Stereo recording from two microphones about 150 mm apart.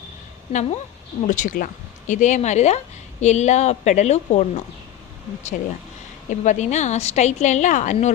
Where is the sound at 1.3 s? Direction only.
60° left (ahead or behind).